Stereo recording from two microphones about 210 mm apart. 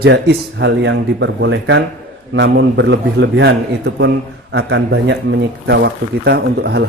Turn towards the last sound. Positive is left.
turn(degrees=-50)  # may be behind; listen again after turning